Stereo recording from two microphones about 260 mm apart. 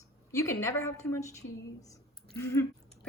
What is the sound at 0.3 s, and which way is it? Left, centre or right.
A woman's voice, centre.